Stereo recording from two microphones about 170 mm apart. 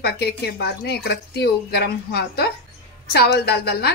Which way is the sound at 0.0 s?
75° left (ahead or behind).